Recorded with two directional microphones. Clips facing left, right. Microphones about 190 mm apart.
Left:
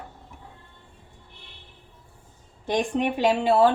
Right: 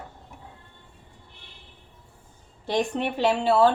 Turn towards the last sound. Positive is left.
turn(degrees=15)  # may be behind; listen again after turning